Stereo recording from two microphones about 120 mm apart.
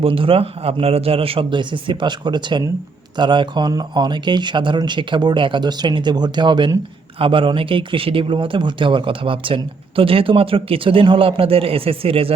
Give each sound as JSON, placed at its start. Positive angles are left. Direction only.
{"t": 0.0, "sound": "speech", "side_deg": -50}